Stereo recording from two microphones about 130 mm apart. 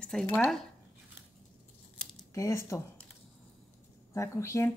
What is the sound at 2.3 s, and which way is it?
Speech, 25° left (ahead or behind).